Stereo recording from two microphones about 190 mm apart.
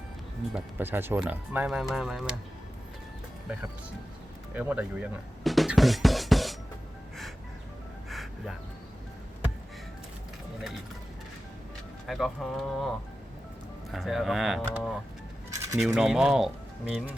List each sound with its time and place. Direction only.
0.5 s speech: 10° right (ahead or behind)
4.5 s speech: 10° right (ahead or behind)
8.1 s music: centre (ahead or behind)
12.0 s speech: centre (ahead or behind)
13.9 s speech: centre (ahead or behind)
15.4 s a sound: 15° right (ahead or behind)
15.8 s speech: centre (ahead or behind)